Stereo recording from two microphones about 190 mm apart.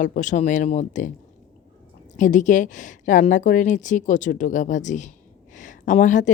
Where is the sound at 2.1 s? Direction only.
40° left (ahead or behind).